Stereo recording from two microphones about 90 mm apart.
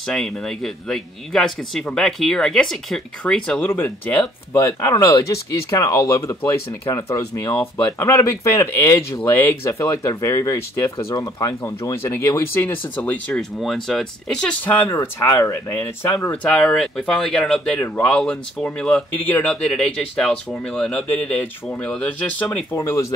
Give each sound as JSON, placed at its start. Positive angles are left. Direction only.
{"t": 0.0, "sound": "a man's voice", "side_deg": 5}
{"t": 3.6, "sound": "speech", "side_deg": 20}
{"t": 4.6, "sound": "speech", "side_deg": 35}
{"t": 9.2, "sound": "speech", "side_deg": 20}
{"t": 9.7, "sound": "speech", "side_deg": 35}
{"t": 12.6, "sound": "speech", "side_deg": 20}
{"t": 13.4, "sound": "speech", "side_deg": 5}
{"t": 14.9, "sound": "speech", "side_deg": 30}
{"t": 16.4, "sound": "speech", "side_deg": 10}
{"t": 17.7, "sound": "speech", "side_deg": 25}
{"t": 18.0, "sound": "speech", "side_deg": 10}
{"t": 19.1, "sound": "speech", "side_deg": 20}
{"t": 22.8, "sound": "speech", "side_deg": 35}